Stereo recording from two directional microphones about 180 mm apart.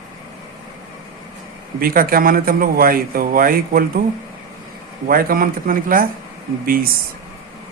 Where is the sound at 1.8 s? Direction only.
55° right (ahead or behind).